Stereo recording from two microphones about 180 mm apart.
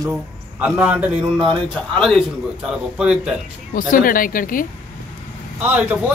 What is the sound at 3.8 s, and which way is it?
Speech, 50° left (ahead or behind).